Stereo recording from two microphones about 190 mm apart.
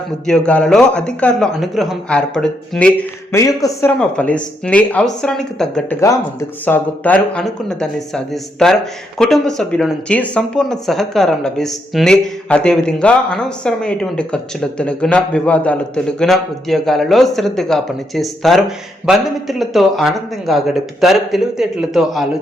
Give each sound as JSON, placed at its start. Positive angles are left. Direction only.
{"t": 0.3, "sound": "speech", "side_deg": 5}
{"t": 3.3, "sound": "speech", "side_deg": 15}